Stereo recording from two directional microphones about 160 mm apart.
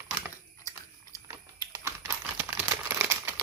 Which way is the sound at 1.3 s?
15° right (ahead or behind).